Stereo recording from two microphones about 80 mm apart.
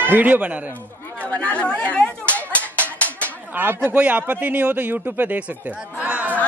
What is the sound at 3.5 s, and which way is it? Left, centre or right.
A man's voice, right.